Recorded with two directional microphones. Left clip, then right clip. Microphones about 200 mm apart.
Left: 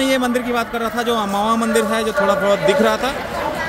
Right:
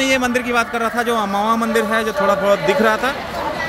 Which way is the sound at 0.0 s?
15° left (ahead or behind).